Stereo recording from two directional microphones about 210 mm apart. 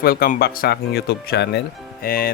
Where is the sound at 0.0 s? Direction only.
45° left (ahead or behind).